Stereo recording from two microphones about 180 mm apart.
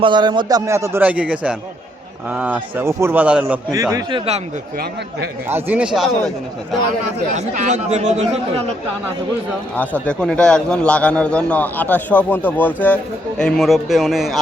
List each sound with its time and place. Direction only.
0.0 s a man's voice: 25° right (ahead or behind); by 3.6 s 5° right (ahead or behind)
5.5 s a man's voice: 10° right (ahead or behind)
7.3 s speech: 40° right (ahead or behind)
9.7 s a man's voice: 10° left (ahead or behind)